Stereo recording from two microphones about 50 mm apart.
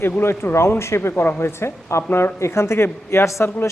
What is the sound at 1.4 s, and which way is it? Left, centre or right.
Speech, left.